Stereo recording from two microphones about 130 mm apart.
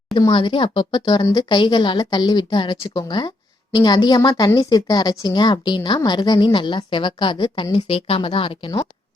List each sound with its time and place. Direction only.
0.2 s speech: 35° left (ahead or behind)